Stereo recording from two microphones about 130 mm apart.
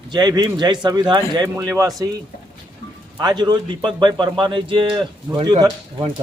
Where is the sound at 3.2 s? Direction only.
35° right (ahead or behind).